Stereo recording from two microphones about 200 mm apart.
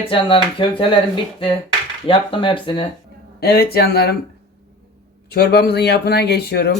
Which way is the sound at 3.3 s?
50° left (ahead or behind).